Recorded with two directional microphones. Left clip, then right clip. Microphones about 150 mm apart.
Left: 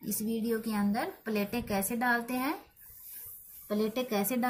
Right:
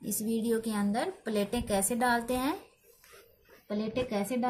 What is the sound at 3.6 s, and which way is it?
Speech, 35° right (ahead or behind).